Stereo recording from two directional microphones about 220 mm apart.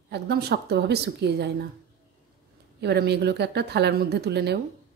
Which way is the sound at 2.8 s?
50° right (ahead or behind).